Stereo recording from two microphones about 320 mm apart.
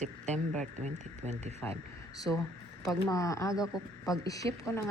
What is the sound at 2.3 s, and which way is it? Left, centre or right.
Speech, centre.